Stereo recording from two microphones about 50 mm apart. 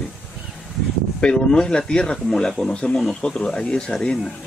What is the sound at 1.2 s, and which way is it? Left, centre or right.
Speech, centre.